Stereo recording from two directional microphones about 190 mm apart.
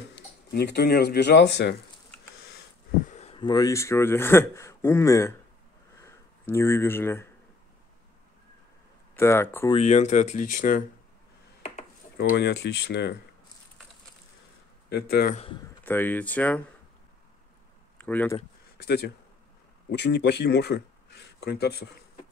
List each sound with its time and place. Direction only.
0.1 s speech: 60° left (ahead or behind)
3.1 s speech: 35° left (ahead or behind); by 7.2 s 10° left (ahead or behind)
9.1 s speech: 10° left (ahead or behind)
9.7 s speech: 35° left (ahead or behind)
12.2 s speech: 60° left (ahead or behind)
14.9 s speech: 55° left (ahead or behind)
15.6 s speech: 10° left (ahead or behind)
17.9 s speech: 10° left (ahead or behind)
18.8 s a man's voice: 60° left (ahead or behind)